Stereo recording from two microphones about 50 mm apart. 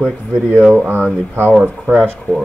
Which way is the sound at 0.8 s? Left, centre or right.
Right.